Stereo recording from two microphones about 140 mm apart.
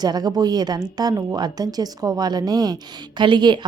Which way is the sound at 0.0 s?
30° right (ahead or behind).